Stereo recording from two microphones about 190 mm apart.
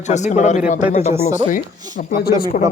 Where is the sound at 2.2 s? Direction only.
50° left (ahead or behind).